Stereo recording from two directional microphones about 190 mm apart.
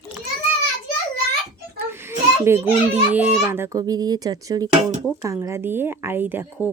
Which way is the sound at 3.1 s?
10° right (ahead or behind).